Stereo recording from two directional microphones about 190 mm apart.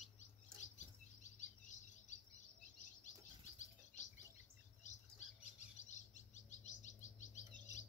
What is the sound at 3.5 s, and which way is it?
Bird, 40° left (ahead or behind).